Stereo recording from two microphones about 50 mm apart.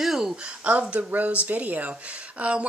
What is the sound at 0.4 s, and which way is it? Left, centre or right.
Speech, right.